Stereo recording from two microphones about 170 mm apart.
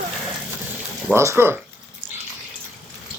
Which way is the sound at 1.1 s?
15° right (ahead or behind).